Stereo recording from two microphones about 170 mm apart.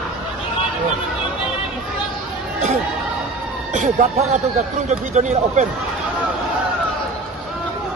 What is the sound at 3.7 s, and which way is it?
Speech, 45° right (ahead or behind).